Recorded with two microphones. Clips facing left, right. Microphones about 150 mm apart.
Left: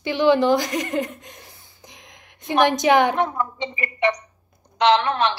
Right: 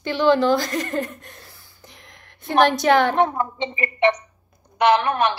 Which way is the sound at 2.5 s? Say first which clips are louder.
Right 1 dB; 15° left (ahead or behind).